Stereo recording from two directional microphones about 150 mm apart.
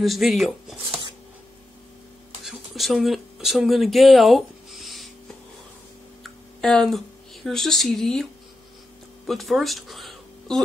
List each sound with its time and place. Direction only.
0.0 s speech: centre (ahead or behind)
2.4 s speech: centre (ahead or behind)
6.2 s a sound: 5° left (ahead or behind)
7.4 s speech: centre (ahead or behind)